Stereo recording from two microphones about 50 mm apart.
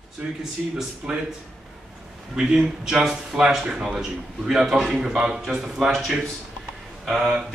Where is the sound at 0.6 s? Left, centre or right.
Right.